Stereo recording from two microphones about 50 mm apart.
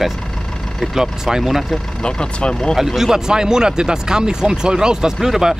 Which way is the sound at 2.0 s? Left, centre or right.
Centre.